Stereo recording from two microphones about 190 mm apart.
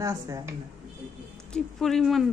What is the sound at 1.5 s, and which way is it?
Speech, centre (ahead or behind).